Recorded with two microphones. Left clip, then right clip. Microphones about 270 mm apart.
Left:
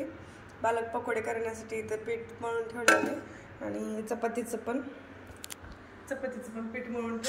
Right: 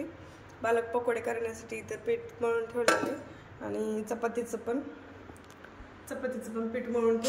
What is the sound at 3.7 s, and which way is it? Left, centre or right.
Speech, centre.